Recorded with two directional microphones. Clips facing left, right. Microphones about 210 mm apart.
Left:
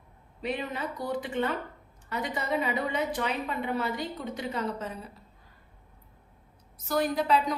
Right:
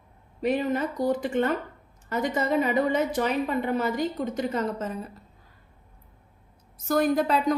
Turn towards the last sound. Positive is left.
turn(degrees=-45)  # may be behind; listen again after turning